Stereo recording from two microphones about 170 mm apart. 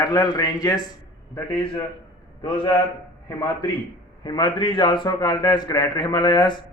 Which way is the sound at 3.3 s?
20° left (ahead or behind).